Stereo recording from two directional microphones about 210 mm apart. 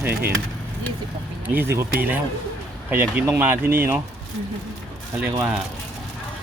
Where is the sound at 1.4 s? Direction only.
10° right (ahead or behind).